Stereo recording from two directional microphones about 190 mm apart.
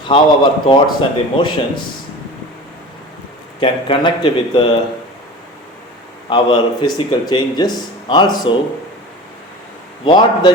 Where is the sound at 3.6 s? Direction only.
25° left (ahead or behind).